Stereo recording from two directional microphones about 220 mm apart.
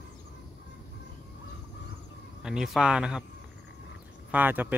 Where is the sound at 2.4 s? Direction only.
Centre (ahead or behind).